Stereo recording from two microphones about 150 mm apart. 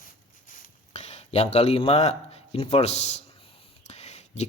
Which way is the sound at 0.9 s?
45° left (ahead or behind).